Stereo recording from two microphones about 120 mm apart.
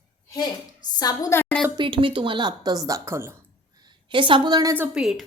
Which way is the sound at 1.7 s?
45° right (ahead or behind).